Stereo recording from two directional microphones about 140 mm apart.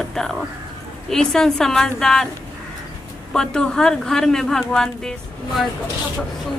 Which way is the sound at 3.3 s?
5° left (ahead or behind).